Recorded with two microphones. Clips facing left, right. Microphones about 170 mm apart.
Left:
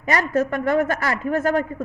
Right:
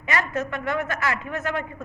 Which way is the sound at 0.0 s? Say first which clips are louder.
Left 6 dB; 40° left (ahead or behind).